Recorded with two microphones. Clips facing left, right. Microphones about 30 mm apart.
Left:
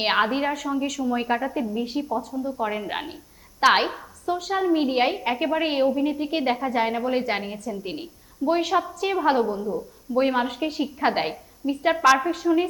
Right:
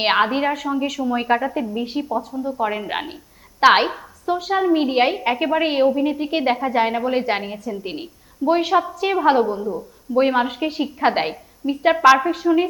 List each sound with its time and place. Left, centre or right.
0.0 s a woman's voice: centre